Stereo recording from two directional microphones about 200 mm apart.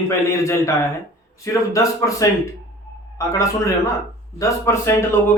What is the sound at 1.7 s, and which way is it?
A man's voice, 15° left (ahead or behind).